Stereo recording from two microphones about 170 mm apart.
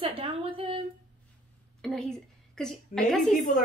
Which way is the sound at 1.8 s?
5° left (ahead or behind).